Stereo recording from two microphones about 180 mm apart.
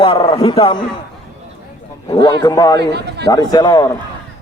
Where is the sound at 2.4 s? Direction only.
20° left (ahead or behind).